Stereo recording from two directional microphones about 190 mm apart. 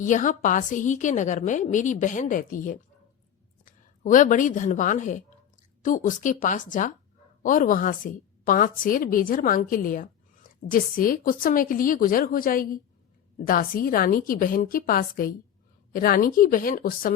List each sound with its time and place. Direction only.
0.0 s a woman's voice: 40° left (ahead or behind)